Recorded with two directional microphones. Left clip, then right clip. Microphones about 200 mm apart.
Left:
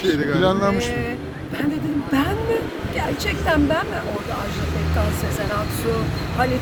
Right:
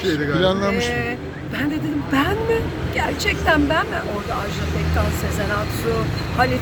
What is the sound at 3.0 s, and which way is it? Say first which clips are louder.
Speech: right 3 dB; 5° left (ahead or behind).